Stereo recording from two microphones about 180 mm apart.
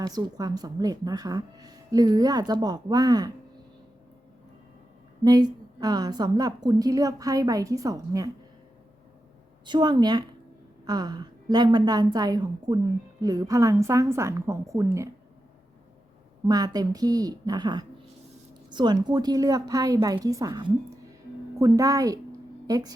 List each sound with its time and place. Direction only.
0.0 s speech: 20° right (ahead or behind)
5.2 s speech: 20° right (ahead or behind)
9.6 s a woman's voice: 25° right (ahead or behind)
16.5 s speech: 20° right (ahead or behind)